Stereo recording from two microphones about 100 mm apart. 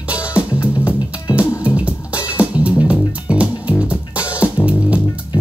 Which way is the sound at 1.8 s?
15° right (ahead or behind).